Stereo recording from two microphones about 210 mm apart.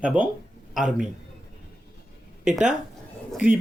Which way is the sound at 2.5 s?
5° right (ahead or behind).